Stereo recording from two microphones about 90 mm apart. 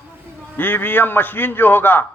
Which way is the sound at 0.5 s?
20° left (ahead or behind).